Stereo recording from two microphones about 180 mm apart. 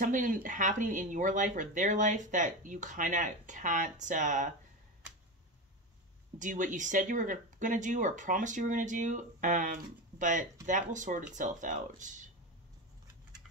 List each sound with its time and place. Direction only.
0.0 s speech: 45° right (ahead or behind)
6.3 s speech: 45° right (ahead or behind)